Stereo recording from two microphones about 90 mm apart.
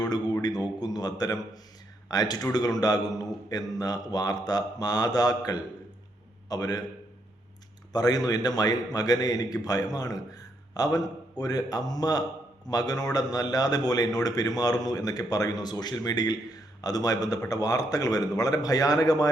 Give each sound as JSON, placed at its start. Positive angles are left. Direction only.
{"t": 0.4, "sound": "a man's voice", "side_deg": 50}
{"t": 7.9, "sound": "a man's voice", "side_deg": 45}